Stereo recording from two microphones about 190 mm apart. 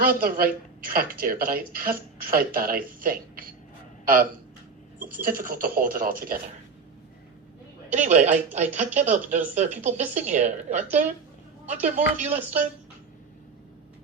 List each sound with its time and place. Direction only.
0.0 s a woman's voice: 50° right (ahead or behind)
7.9 s a woman's voice: 40° right (ahead or behind)